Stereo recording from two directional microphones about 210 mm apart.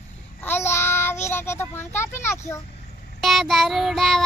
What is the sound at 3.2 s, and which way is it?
A child's voice, centre (ahead or behind).